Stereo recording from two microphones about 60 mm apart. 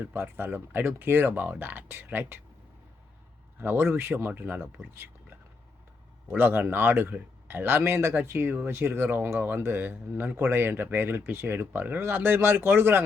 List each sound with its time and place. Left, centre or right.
0.0 s speech: right
3.6 s speech: right
6.3 s speech: right